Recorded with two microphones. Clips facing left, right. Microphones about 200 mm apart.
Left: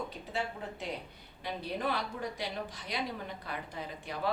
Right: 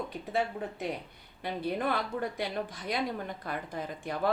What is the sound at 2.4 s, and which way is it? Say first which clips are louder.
A woman's voice: right 4 dB; 50° right (ahead or behind).